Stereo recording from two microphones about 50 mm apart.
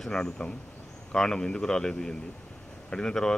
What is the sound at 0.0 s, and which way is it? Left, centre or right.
Speech, centre.